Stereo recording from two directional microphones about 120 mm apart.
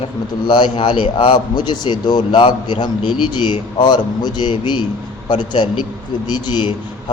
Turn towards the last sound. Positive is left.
turn(degrees=40)  # may be behind; listen again after turning